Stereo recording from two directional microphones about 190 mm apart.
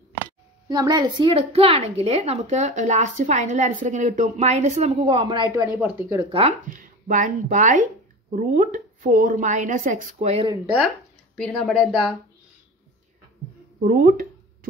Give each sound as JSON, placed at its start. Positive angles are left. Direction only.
{"t": 0.7, "sound": "a woman's voice", "side_deg": -20}
{"t": 5.5, "sound": "speech", "side_deg": -15}
{"t": 6.7, "sound": "a woman's voice", "side_deg": -45}
{"t": 10.5, "sound": "speech", "side_deg": -5}
{"t": 11.3, "sound": "speech", "side_deg": 5}
{"t": 13.7, "sound": "a sound", "side_deg": -50}